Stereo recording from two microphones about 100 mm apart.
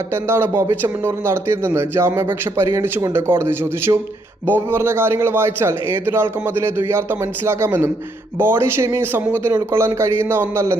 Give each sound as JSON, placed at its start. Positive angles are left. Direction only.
{"t": 0.1, "sound": "a man's voice", "side_deg": -25}